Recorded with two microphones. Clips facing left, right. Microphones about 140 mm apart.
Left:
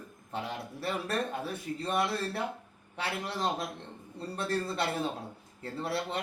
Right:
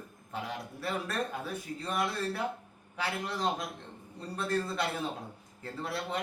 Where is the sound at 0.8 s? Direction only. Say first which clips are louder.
Left 2 dB; 30° left (ahead or behind).